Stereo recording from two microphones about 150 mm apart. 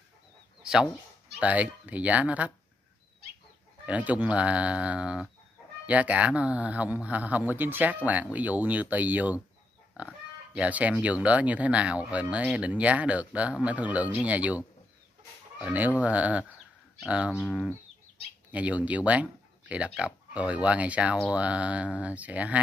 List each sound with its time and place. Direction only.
1.4 s speech: 10° right (ahead or behind)
3.8 s speech: 10° right (ahead or behind)
15.6 s speech: 10° right (ahead or behind)